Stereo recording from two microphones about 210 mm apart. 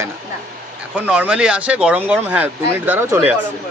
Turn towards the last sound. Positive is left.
turn(degrees=-10)  # may be behind; listen again after turning